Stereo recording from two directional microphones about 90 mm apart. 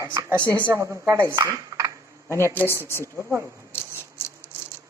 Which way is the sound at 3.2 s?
30° right (ahead or behind).